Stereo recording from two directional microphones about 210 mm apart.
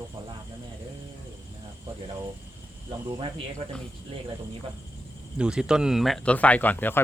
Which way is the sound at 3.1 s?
25° right (ahead or behind).